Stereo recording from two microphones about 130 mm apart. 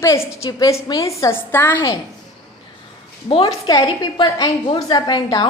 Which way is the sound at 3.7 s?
30° left (ahead or behind).